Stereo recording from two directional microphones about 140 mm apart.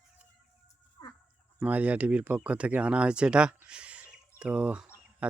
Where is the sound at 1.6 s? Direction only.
10° right (ahead or behind).